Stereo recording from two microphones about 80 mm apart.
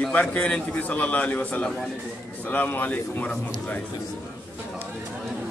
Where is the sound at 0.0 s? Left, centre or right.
Centre.